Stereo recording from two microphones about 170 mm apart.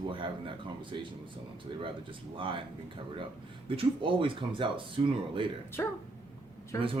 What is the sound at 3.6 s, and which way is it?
A man's voice, 30° right (ahead or behind).